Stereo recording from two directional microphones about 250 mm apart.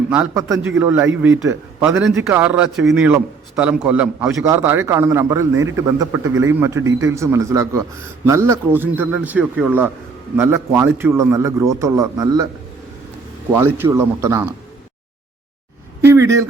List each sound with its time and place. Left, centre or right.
0.1 s a man's voice: centre
13.7 s a man's voice: centre
16.0 s speech: centre